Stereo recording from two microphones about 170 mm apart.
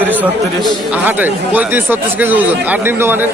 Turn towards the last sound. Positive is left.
turn(degrees=-10)  # may be behind; listen again after turning